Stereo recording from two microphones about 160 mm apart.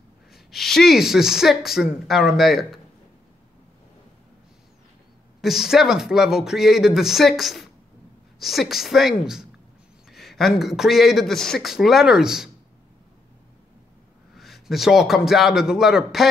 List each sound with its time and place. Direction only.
0.3 s speech: centre (ahead or behind)
5.4 s speech: centre (ahead or behind)
14.3 s a man's voice: centre (ahead or behind)